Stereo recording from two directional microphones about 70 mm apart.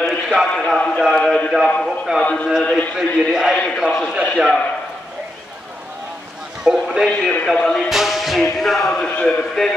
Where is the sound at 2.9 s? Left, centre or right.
Centre.